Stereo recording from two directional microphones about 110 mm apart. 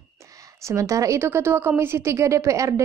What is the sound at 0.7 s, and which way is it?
A woman's voice, 30° right (ahead or behind).